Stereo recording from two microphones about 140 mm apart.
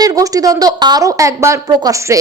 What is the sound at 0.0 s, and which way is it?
A woman's voice, 25° right (ahead or behind).